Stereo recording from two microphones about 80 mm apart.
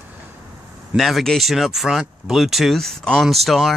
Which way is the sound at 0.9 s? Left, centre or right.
Centre.